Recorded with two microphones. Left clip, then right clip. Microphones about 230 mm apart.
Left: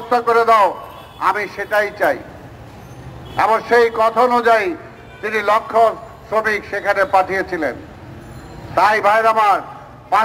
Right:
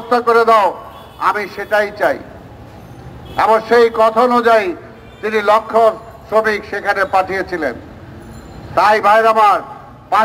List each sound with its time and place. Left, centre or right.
0.1 s a man's voice: right
3.3 s a man's voice: right
8.7 s a man's voice: right